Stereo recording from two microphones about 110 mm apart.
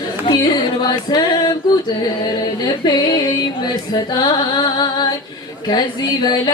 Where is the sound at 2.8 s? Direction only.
40° left (ahead or behind).